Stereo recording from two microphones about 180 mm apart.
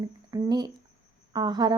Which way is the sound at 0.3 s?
20° right (ahead or behind).